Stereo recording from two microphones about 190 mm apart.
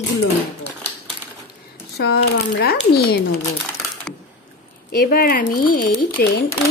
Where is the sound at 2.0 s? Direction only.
55° left (ahead or behind).